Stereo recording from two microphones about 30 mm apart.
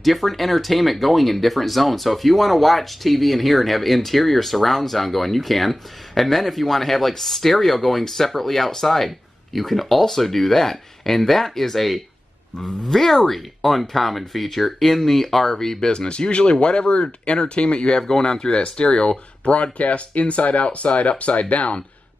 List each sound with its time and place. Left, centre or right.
0.0 s speech: centre; by 18.0 s left
18.0 s speech: centre
18.4 s speech: left